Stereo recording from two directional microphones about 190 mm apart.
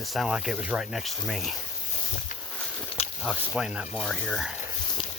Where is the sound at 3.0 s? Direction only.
35° left (ahead or behind).